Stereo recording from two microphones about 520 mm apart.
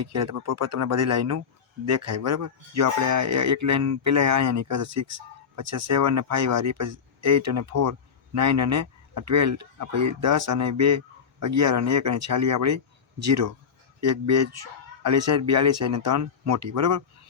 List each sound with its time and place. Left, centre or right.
0.0 s speech: right